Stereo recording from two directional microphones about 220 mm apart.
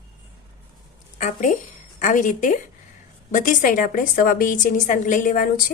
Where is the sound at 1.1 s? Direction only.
35° left (ahead or behind).